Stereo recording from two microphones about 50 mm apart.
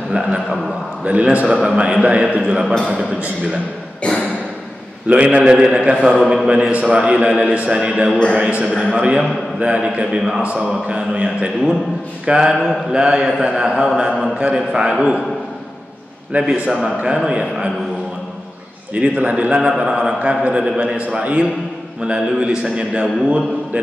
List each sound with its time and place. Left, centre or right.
0.2 s a man's voice: right
4.0 s a sound: left
5.0 s a man's voice: right
6.5 s a man's voice: right
16.3 s a man's voice: right
18.9 s a man's voice: right